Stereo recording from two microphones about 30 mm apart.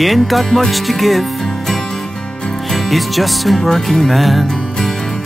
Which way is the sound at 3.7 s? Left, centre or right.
Centre.